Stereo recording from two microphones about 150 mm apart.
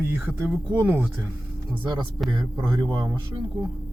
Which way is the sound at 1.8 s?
30° right (ahead or behind).